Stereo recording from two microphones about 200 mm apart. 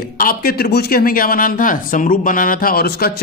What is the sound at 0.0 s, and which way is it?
Speech, 50° left (ahead or behind).